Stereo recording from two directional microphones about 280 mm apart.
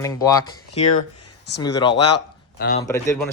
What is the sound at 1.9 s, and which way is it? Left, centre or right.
Speech, left.